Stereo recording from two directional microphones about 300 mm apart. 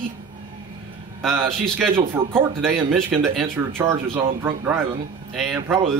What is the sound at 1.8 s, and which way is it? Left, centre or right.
A man's voice, centre.